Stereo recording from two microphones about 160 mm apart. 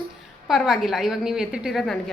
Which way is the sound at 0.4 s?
Centre (ahead or behind).